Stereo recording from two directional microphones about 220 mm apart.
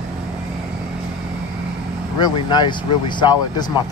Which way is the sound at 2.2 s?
20° left (ahead or behind).